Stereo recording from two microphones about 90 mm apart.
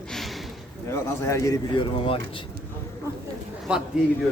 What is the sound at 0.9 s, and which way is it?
Speech, 30° left (ahead or behind).